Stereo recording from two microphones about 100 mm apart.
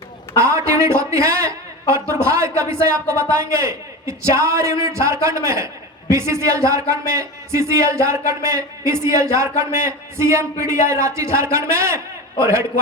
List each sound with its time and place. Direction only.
0.3 s a woman's voice: 30° right (ahead or behind)